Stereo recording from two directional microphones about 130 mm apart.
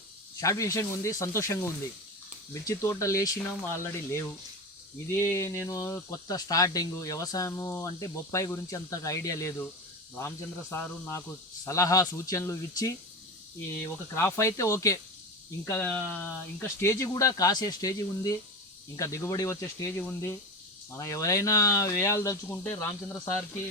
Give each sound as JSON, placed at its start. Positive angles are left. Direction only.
{"t": 0.3, "sound": "speech", "side_deg": 25}
{"t": 20.0, "sound": "speech", "side_deg": 10}
{"t": 20.9, "sound": "speech", "side_deg": 25}